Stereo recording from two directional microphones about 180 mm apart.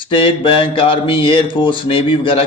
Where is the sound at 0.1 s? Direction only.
30° left (ahead or behind).